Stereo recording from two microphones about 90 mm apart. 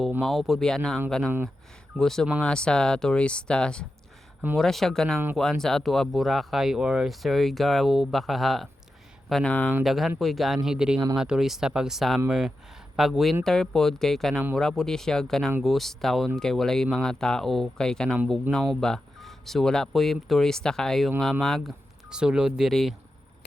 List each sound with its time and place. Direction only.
0.2 s speech: centre (ahead or behind)
9.3 s speech: 15° left (ahead or behind)
9.8 s speech: centre (ahead or behind)